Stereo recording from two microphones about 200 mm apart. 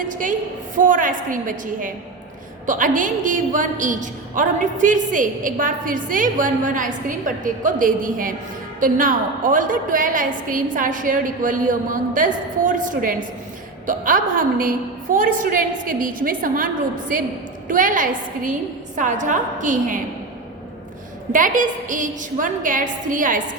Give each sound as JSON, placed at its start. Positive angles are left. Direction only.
{"t": 0.0, "sound": "a woman's voice", "side_deg": -40}
{"t": 17.7, "sound": "a woman's voice", "side_deg": -40}
{"t": 21.3, "sound": "a woman's voice", "side_deg": -40}